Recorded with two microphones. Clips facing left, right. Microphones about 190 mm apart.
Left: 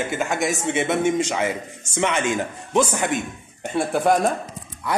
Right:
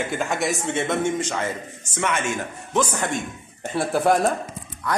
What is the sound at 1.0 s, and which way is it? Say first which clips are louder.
A man's voice: left 3 dB; 15° left (ahead or behind).